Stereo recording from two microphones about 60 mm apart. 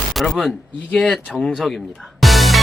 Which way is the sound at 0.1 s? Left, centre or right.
Centre.